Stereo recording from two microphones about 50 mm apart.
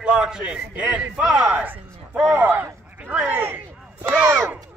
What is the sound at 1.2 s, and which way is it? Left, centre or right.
Speech, centre.